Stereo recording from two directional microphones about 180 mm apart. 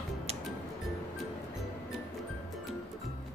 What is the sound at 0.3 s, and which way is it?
Music, 35° right (ahead or behind).